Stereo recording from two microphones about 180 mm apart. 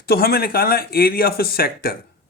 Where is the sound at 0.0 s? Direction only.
60° left (ahead or behind).